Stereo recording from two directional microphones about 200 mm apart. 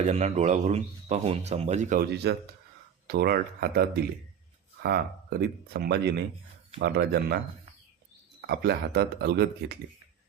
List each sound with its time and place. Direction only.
0.1 s speech: 35° right (ahead or behind); by 9.7 s 55° right (ahead or behind)